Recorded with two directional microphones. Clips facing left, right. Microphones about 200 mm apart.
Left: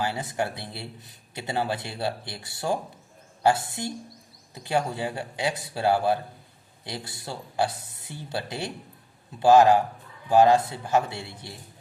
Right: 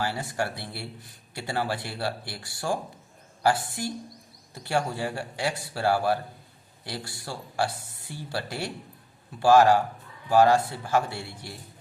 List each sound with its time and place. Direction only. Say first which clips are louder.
0.0 s speech: left 1 dB; 20° left (ahead or behind)